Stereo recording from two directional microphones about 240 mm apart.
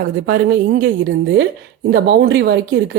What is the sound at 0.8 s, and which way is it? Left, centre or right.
A woman's voice, right.